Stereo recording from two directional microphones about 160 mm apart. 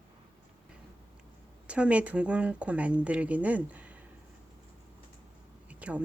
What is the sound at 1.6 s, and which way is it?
Speech, 10° right (ahead or behind).